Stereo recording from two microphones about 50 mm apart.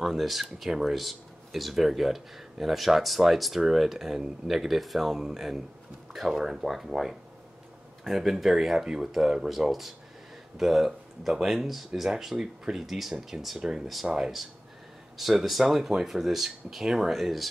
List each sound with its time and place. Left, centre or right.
0.0 s speech: centre
13.6 s speech: centre